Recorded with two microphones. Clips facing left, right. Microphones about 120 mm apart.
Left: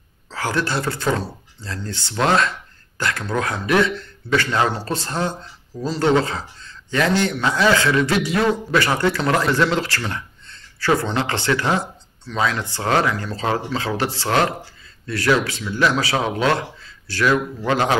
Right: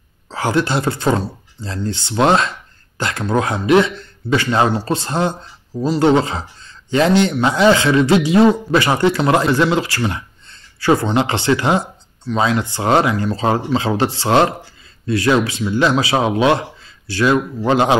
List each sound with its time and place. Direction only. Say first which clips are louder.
0.3 s speech: right 5 dB; 20° right (ahead or behind)